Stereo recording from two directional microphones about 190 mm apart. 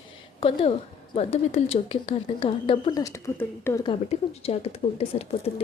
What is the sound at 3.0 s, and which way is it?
Speech, 15° left (ahead or behind).